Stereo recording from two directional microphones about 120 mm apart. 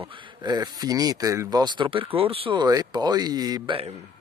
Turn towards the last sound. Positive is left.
turn(degrees=-35)  # may be behind; listen again after turning